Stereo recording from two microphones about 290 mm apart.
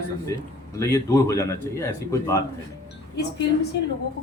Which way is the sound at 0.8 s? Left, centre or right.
Centre.